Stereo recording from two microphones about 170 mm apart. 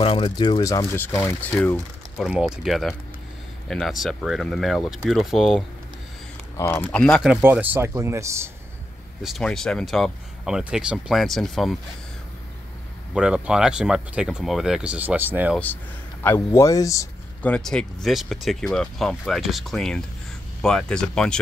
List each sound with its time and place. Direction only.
0.0 s speech: 30° left (ahead or behind); by 1.5 s 10° left (ahead or behind)
2.1 s speech: centre (ahead or behind)
6.5 s speech: 15° left (ahead or behind)
7.4 s speech: 10° right (ahead or behind)
9.2 s speech: centre (ahead or behind)
13.1 s speech: 5° right (ahead or behind)
15.5 s speech: 10° left (ahead or behind)
17.4 s speech: 5° left (ahead or behind)